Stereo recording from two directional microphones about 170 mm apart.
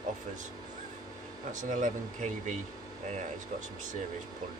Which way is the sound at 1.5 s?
50° right (ahead or behind).